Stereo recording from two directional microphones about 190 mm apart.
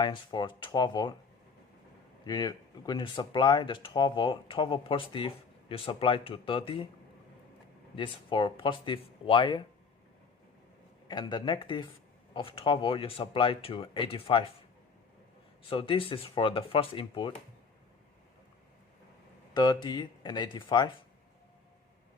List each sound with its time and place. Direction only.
0.0 s speech: 20° left (ahead or behind)
2.2 s speech: 20° left (ahead or behind)
7.9 s speech: 25° left (ahead or behind)
11.1 s speech: 20° left (ahead or behind)
15.7 s speech: 25° left (ahead or behind)
19.5 s speech: 20° left (ahead or behind)